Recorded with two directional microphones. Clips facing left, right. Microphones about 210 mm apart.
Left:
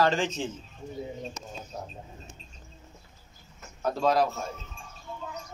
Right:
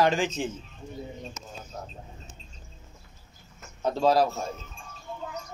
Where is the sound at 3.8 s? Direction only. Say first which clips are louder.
Right 2 dB; 30° right (ahead or behind).